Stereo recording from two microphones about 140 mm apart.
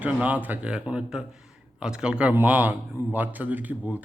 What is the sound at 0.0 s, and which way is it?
A man's voice, 10° right (ahead or behind).